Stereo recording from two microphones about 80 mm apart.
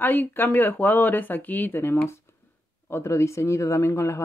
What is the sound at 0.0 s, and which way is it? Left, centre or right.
Speech, left.